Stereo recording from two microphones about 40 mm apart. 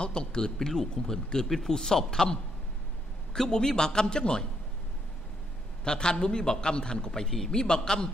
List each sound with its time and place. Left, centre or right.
0.0 s speech: left
3.3 s a man's voice: centre
5.9 s a man's voice: left